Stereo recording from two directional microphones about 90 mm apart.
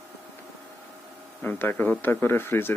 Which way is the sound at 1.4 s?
20° left (ahead or behind).